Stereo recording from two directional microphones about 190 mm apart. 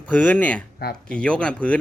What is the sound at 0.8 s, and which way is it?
Speech, 55° left (ahead or behind).